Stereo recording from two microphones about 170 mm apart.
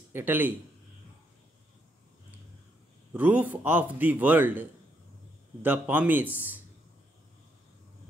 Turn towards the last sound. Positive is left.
turn(degrees=-10)  # may be behind; listen again after turning